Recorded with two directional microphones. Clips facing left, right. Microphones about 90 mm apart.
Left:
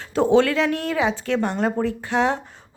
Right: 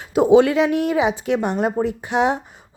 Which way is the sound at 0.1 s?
15° right (ahead or behind).